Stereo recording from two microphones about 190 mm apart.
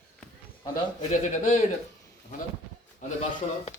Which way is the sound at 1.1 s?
40° left (ahead or behind).